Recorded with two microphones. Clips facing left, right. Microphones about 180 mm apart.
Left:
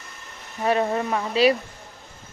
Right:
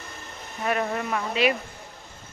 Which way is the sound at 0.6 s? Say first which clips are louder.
Left 4 dB; 30° left (ahead or behind).